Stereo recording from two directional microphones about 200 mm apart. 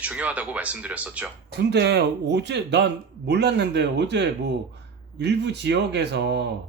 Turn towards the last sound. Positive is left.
turn(degrees=-60)  # may be behind; listen again after turning